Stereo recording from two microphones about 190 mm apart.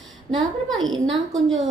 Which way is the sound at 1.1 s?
Centre (ahead or behind).